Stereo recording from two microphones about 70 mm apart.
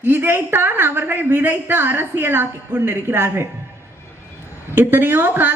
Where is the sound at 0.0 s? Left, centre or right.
Right.